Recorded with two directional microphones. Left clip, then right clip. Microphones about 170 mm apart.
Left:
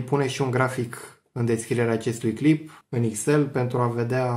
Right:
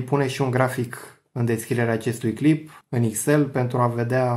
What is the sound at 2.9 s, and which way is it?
Speech, 30° right (ahead or behind).